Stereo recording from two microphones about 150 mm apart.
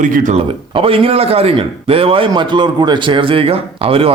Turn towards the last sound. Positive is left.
turn(degrees=-40)  # may be behind; listen again after turning